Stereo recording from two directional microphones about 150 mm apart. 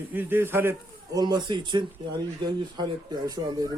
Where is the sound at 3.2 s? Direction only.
25° right (ahead or behind).